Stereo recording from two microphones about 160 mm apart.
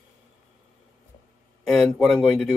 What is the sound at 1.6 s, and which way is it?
Speech, centre (ahead or behind).